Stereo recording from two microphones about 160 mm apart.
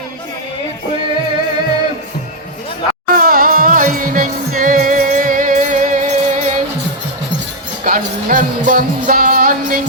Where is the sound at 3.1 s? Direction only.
60° right (ahead or behind).